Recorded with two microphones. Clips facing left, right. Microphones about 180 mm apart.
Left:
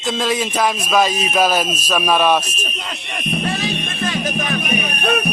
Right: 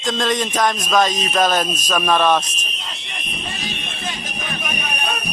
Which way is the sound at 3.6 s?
80° left.